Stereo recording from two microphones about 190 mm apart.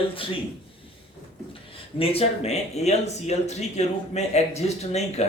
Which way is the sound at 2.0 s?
30° left (ahead or behind).